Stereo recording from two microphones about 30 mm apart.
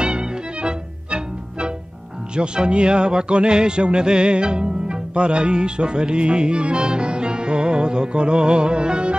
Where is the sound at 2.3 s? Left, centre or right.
Right.